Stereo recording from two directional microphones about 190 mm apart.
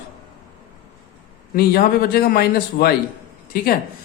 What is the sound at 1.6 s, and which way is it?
Speech, 50° left (ahead or behind).